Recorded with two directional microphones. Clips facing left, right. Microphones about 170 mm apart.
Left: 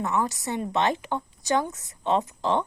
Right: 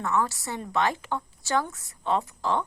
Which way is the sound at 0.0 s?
20° left (ahead or behind).